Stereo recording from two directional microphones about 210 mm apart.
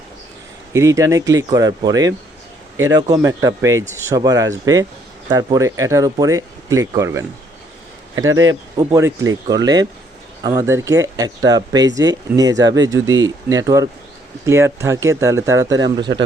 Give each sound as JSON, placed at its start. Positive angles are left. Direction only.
{"t": 0.7, "sound": "speech", "side_deg": -15}
{"t": 8.8, "sound": "speech", "side_deg": -15}